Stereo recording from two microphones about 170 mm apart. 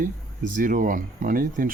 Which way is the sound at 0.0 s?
50° right (ahead or behind).